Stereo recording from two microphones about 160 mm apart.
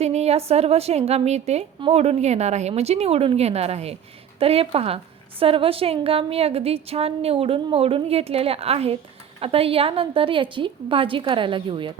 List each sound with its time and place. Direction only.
0.0 s a woman's voice: 45° right (ahead or behind)